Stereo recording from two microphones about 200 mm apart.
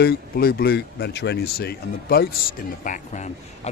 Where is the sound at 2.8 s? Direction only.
40° left (ahead or behind).